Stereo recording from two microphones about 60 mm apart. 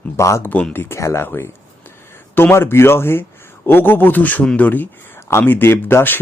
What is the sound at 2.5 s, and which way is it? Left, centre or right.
Speech, left.